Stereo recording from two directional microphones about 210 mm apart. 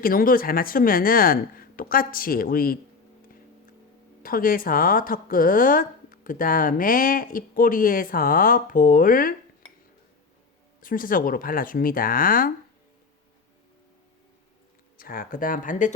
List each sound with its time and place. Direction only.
0.0 s speech: 45° left (ahead or behind)
4.2 s a woman's voice: 40° left (ahead or behind)
10.8 s a woman's voice: 40° left (ahead or behind)
14.9 s a woman's voice: 40° left (ahead or behind)